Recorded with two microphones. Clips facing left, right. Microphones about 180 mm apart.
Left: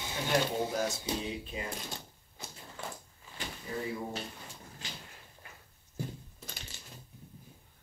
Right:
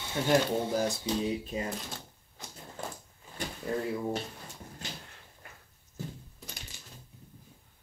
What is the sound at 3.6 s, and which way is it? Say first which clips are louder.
Drawer open or close: right 7 dB; 65° right (ahead or behind).